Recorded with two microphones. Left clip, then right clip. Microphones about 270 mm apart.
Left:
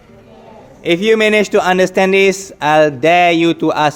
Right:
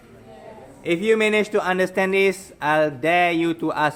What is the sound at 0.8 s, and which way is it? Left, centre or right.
A man's voice, left.